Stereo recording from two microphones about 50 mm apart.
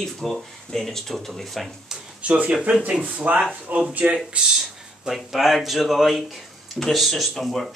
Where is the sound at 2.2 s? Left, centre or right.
Right.